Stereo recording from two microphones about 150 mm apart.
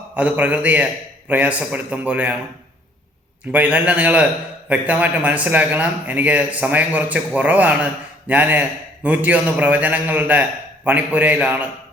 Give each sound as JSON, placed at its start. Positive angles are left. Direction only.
{"t": 0.1, "sound": "a man's voice", "side_deg": -10}
{"t": 3.5, "sound": "a man's voice", "side_deg": -10}